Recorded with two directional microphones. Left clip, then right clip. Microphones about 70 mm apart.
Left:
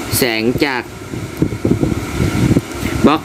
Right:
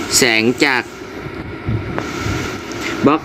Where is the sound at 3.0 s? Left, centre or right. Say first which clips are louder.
Left 1 dB; left.